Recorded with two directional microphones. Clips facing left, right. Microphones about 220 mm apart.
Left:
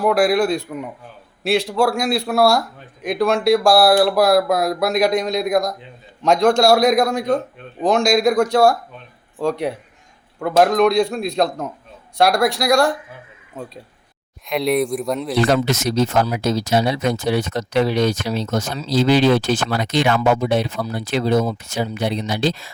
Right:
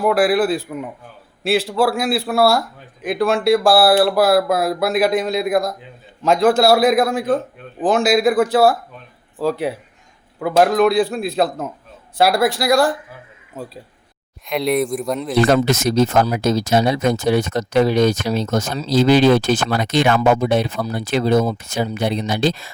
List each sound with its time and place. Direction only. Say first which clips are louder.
0.0 s speech: even; centre (ahead or behind)
15.4 s speech: right 3 dB; 50° right (ahead or behind)